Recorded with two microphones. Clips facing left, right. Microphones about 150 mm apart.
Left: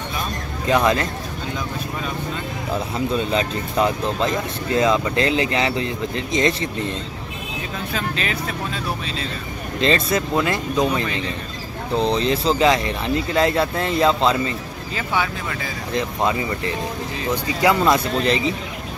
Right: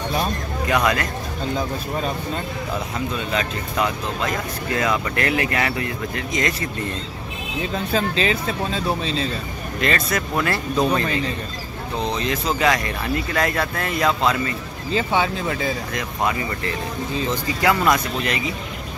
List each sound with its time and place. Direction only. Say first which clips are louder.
0.7 s speech: left 3 dB; 25° left (ahead or behind)
3.3 s speech: left 3 dB; 30° left (ahead or behind)
7.9 s speech: right 5 dB; 30° right (ahead or behind)
9.8 s speech: left 4 dB; 25° left (ahead or behind)
12.0 s speech: left 4 dB; 30° left (ahead or behind)
14.9 s speech: right 3 dB; 25° right (ahead or behind)
15.9 s speech: left 3 dB; 25° left (ahead or behind)
17.6 s speech: left 2 dB; 20° left (ahead or behind)